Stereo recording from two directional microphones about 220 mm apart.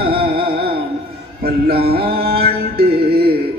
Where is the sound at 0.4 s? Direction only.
45° right (ahead or behind).